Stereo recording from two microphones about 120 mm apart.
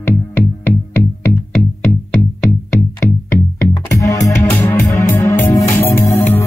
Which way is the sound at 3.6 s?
25° left (ahead or behind).